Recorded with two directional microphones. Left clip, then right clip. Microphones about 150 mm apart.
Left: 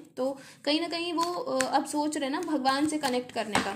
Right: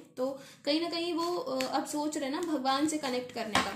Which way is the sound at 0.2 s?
45° left (ahead or behind).